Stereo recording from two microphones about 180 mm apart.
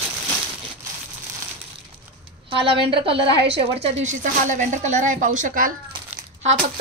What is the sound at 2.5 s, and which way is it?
A woman's voice, 30° right (ahead or behind).